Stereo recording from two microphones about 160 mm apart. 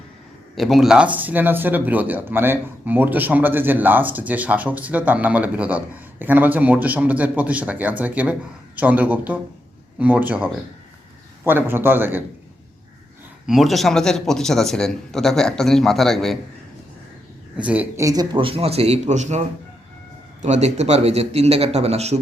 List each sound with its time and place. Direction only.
0.5 s speech: centre (ahead or behind)
13.5 s a man's voice: centre (ahead or behind)
17.6 s a man's voice: 10° right (ahead or behind); by 19.4 s 45° right (ahead or behind)
20.4 s speech: 45° right (ahead or behind)